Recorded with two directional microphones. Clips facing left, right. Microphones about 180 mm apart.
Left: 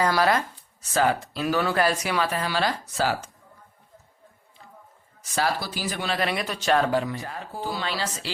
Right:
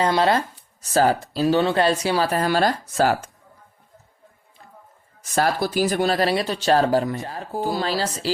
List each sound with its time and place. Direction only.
0.0 s speech: 25° right (ahead or behind)
0.9 s speech: 35° right (ahead or behind)
5.3 s speech: 50° right (ahead or behind); by 7.4 s 30° right (ahead or behind)
7.5 s speech: 45° right (ahead or behind)